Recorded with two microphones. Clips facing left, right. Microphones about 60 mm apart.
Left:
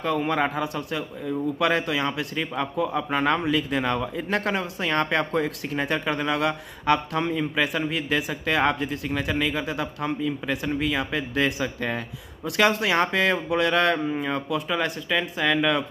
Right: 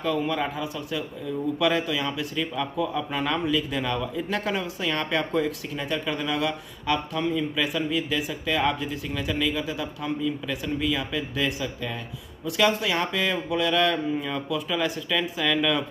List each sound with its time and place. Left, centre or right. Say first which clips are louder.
0.0 s speech: left 2 dB; left